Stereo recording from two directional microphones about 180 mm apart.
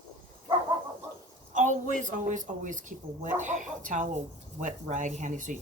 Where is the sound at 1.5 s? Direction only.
40° right (ahead or behind).